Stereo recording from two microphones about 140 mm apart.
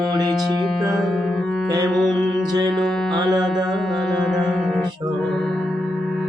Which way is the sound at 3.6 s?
Centre (ahead or behind).